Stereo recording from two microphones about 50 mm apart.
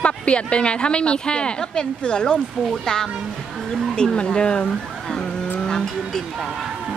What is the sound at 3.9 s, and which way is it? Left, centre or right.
Speech, centre.